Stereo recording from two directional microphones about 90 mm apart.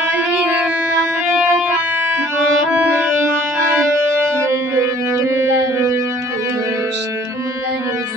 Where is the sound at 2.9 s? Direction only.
25° right (ahead or behind).